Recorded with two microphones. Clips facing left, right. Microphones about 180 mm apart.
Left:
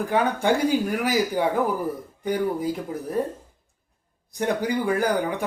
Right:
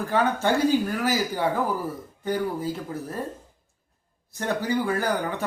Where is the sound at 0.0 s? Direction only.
15° left (ahead or behind).